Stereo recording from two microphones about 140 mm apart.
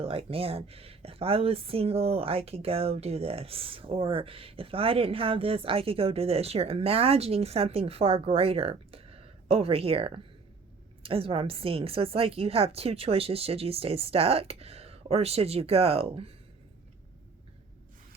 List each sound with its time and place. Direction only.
0.0 s speech: 45° right (ahead or behind)